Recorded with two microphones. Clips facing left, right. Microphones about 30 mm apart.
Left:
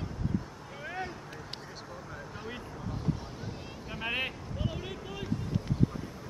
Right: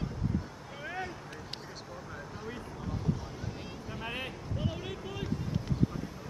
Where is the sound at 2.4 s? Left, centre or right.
Centre.